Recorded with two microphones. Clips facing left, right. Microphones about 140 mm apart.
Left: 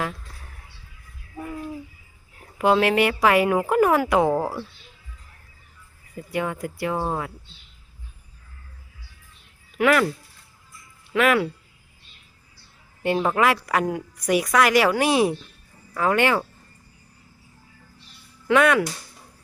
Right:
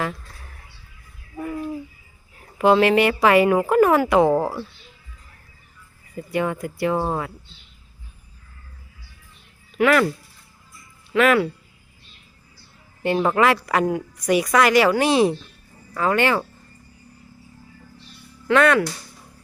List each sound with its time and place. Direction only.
2.6 s a woman's voice: centre (ahead or behind)
6.1 s a woman's voice: centre (ahead or behind)
9.7 s a woman's voice: 5° left (ahead or behind)
11.1 s a woman's voice: 5° left (ahead or behind)
13.0 s a woman's voice: 5° left (ahead or behind)
18.4 s speech: 10° left (ahead or behind)